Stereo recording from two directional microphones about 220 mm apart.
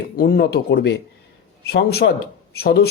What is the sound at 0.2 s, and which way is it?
A woman's voice, 45° left (ahead or behind).